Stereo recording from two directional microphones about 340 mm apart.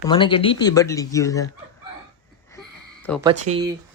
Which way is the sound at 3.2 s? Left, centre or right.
Centre.